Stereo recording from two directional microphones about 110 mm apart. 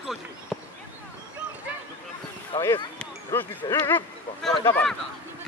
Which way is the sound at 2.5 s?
45° left (ahead or behind).